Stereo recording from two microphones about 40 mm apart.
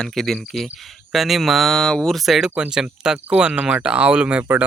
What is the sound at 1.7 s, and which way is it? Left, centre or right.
Speech, centre.